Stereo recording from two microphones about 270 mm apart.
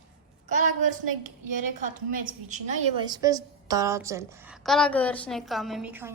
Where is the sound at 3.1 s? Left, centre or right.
Centre.